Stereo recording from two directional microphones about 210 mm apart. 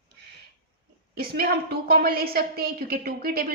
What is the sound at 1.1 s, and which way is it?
A woman's voice, 45° right (ahead or behind).